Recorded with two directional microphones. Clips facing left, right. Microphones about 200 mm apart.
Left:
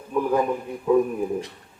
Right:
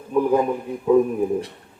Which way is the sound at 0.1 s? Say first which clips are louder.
Right 3 dB; 15° right (ahead or behind).